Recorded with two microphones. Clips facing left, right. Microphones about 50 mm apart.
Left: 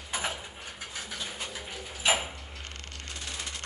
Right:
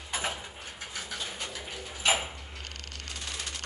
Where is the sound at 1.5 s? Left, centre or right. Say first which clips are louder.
Even; centre.